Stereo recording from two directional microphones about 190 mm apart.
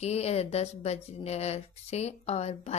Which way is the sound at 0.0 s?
35° left (ahead or behind).